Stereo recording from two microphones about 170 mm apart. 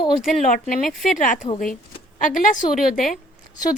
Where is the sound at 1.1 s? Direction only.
50° left (ahead or behind).